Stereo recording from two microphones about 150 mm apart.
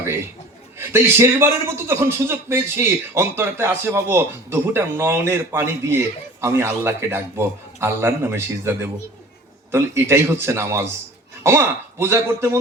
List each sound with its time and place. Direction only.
0.8 s a man's voice: 15° right (ahead or behind)
9.7 s a man's voice: 15° right (ahead or behind)